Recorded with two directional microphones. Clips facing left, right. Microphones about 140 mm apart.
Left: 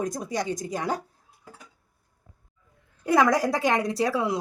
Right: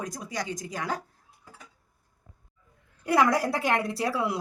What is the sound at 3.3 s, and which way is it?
Speech, 15° left (ahead or behind).